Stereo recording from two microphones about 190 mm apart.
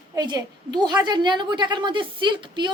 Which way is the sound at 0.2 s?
20° right (ahead or behind).